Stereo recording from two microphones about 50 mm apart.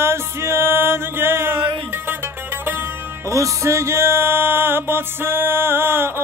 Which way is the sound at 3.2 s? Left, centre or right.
Right.